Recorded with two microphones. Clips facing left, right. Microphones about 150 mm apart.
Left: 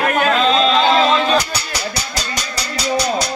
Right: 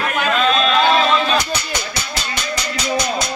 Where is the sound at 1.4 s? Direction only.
35° left (ahead or behind).